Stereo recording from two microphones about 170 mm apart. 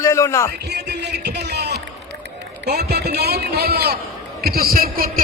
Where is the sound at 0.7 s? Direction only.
80° right.